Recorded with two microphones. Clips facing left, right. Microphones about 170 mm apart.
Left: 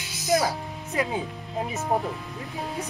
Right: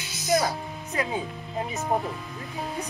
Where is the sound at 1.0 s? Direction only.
5° left (ahead or behind).